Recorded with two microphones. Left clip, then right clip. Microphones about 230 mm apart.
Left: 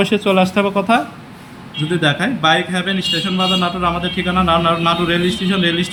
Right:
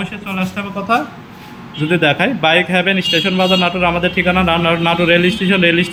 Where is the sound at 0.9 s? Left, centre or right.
Centre.